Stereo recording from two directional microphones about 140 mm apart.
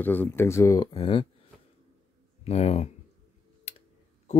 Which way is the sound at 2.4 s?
50° left (ahead or behind).